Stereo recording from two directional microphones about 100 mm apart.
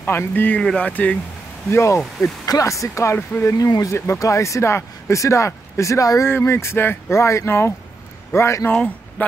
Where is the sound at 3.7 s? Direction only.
35° left (ahead or behind).